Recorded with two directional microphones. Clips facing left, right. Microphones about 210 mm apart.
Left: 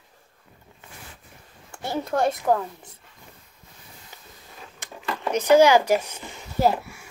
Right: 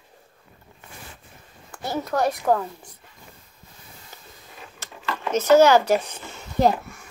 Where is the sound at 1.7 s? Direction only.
25° left (ahead or behind).